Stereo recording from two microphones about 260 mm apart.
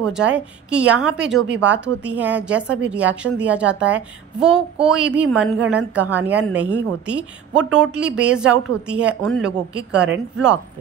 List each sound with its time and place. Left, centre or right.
0.3 s a woman's voice: centre
1.5 s speech: right
2.0 s a woman's voice: centre